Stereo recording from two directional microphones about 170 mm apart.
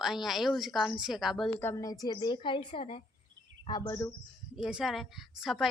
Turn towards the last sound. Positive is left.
turn(degrees=0)  # may be behind; listen again after turning